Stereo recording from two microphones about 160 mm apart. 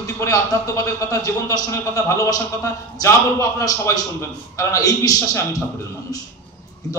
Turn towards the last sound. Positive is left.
turn(degrees=25)  # may be behind; listen again after turning